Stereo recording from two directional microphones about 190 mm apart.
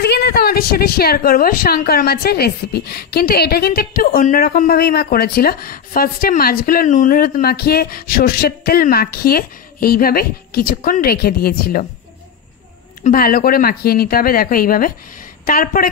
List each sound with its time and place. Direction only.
0.0 s a woman's voice: 60° left (ahead or behind)
13.0 s a woman's voice: 50° left (ahead or behind)